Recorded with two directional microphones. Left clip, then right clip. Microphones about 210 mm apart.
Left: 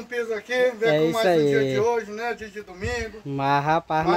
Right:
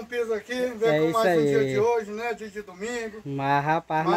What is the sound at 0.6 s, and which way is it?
Speech, 15° left (ahead or behind).